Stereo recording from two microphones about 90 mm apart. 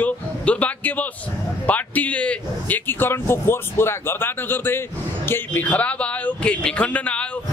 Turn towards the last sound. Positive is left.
turn(degrees=15)  # may be behind; listen again after turning